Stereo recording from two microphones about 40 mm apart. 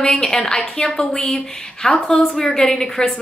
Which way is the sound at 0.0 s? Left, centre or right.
Centre.